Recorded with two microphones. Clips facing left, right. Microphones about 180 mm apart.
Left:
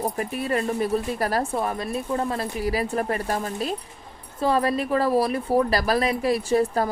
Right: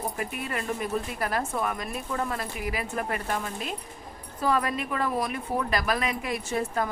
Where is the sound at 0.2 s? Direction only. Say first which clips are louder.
Left 7 dB; 35° left (ahead or behind).